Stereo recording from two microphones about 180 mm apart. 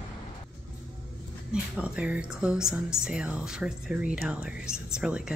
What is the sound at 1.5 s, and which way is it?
A woman's voice, 5° right (ahead or behind).